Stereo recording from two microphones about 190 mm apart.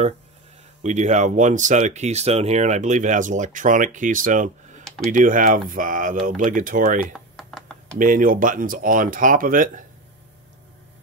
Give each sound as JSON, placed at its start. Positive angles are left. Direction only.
{"t": 0.8, "sound": "speech", "side_deg": -40}
{"t": 4.8, "sound": "computer keyboard", "side_deg": 0}
{"t": 5.1, "sound": "speech", "side_deg": -45}
{"t": 7.1, "sound": "typing", "side_deg": 0}
{"t": 8.0, "sound": "speech", "side_deg": -45}